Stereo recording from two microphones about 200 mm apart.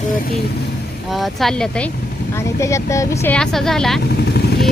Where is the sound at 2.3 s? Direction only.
15° left (ahead or behind).